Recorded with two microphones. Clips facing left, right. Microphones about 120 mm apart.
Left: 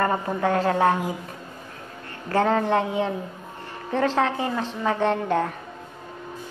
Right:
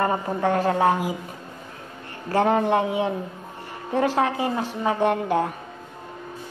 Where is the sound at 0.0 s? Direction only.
25° right (ahead or behind).